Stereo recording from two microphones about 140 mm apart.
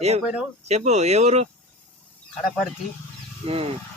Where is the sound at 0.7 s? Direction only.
55° right (ahead or behind).